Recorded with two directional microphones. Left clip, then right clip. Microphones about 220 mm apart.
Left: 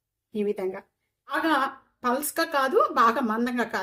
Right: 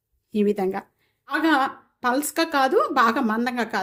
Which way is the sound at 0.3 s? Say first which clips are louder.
Right 5 dB; 40° right (ahead or behind).